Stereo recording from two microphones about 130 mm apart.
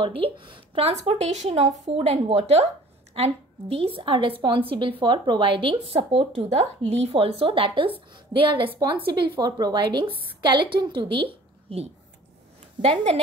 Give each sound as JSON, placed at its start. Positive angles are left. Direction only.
{"t": 0.0, "sound": "a woman's voice", "side_deg": -40}